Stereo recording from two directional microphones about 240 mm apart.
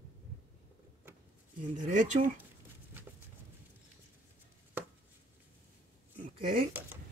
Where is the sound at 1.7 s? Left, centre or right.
Right.